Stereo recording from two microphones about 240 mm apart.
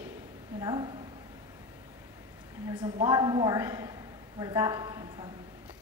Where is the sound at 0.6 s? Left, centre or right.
Centre.